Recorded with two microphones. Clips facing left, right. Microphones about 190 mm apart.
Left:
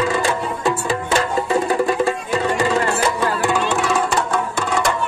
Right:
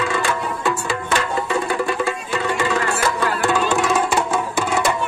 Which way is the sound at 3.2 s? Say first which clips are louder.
Left 1 dB; 15° left (ahead or behind).